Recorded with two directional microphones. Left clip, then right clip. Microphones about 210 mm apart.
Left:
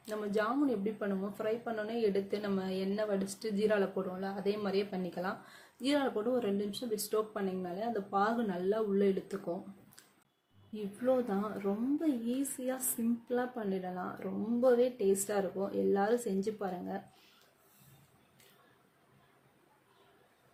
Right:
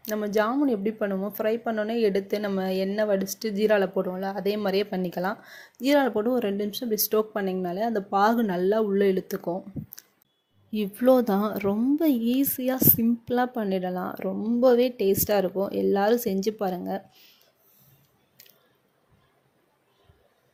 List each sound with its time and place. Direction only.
0.0 s speech: 35° right (ahead or behind)
10.7 s speech: 40° right (ahead or behind)